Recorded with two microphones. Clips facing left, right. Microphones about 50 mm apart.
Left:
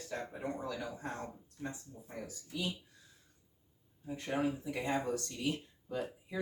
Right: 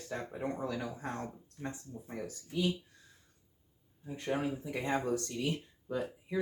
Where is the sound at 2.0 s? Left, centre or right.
Right.